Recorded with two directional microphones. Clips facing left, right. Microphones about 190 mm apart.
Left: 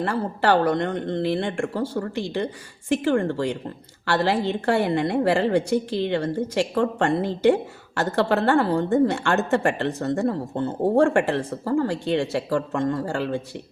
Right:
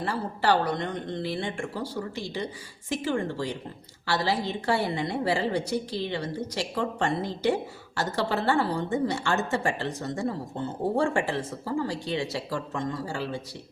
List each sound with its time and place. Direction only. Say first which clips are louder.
0.0 s a woman's voice: left 5 dB; 55° left (ahead or behind)